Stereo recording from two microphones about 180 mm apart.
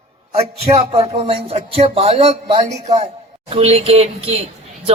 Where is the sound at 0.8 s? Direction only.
35° right (ahead or behind).